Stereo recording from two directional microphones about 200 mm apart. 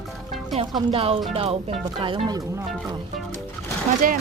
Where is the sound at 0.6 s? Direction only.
25° right (ahead or behind).